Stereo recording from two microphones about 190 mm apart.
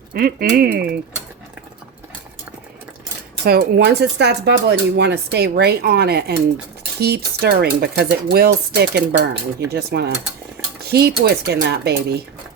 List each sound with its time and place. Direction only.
0.1 s speech: 50° right (ahead or behind)
3.4 s speech: 55° right (ahead or behind)